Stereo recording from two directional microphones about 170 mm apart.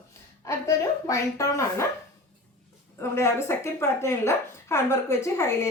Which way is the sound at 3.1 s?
15° left (ahead or behind).